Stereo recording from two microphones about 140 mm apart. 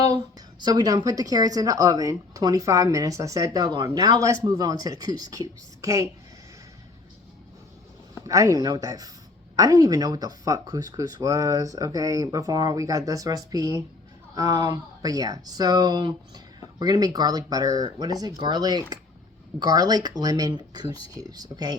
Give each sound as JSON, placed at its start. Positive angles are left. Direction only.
{"t": 0.6, "sound": "speech", "side_deg": -30}
{"t": 8.3, "sound": "speech", "side_deg": -25}